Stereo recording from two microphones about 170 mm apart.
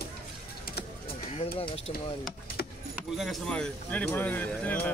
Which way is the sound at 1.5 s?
35° left (ahead or behind).